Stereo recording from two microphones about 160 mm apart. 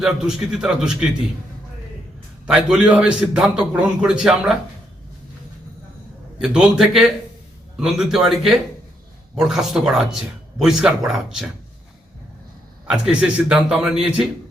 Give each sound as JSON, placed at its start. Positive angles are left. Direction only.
{"t": 0.0, "sound": "speech", "side_deg": -5}
{"t": 2.5, "sound": "speech", "side_deg": -5}
{"t": 6.4, "sound": "speech", "side_deg": -5}
{"t": 12.9, "sound": "speech", "side_deg": -5}